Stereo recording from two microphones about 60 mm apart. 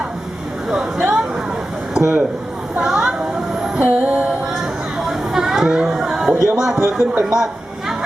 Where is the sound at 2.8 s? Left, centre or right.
Centre.